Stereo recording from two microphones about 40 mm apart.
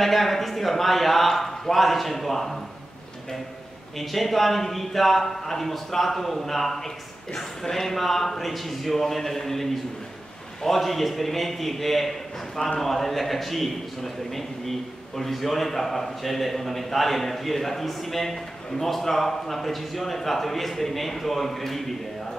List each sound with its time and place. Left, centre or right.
0.0 s a man's voice: centre
4.0 s a man's voice: centre